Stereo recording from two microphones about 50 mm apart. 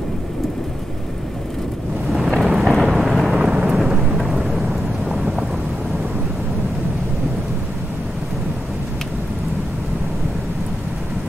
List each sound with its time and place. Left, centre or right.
2.4 s thunder: centre
3.3 s thunder: centre